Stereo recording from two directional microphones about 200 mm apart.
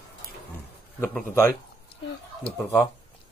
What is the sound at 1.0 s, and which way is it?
Speech, 10° left (ahead or behind).